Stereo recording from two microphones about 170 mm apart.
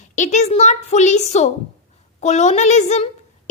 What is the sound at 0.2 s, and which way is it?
A woman's voice, 45° left (ahead or behind).